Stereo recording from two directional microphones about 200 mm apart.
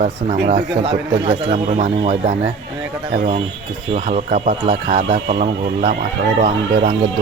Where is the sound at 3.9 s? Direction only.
35° right (ahead or behind).